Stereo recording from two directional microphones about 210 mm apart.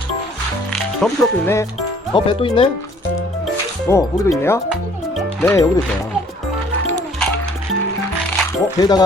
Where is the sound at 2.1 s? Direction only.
25° left (ahead or behind).